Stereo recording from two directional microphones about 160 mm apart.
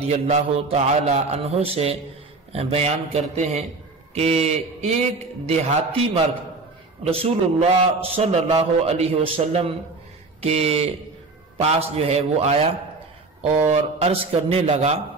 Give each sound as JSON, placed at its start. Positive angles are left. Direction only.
{"t": 0.0, "sound": "a man's voice", "side_deg": -40}
{"t": 13.7, "sound": "a man's voice", "side_deg": -40}